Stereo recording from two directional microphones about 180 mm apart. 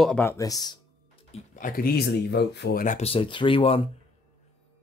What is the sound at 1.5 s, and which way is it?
Speech, 50° left (ahead or behind).